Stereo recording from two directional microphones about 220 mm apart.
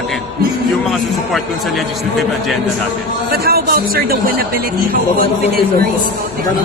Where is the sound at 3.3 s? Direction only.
45° right (ahead or behind).